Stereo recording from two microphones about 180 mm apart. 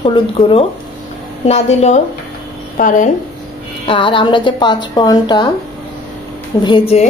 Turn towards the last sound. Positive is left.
turn(degrees=30)  # may be behind; listen again after turning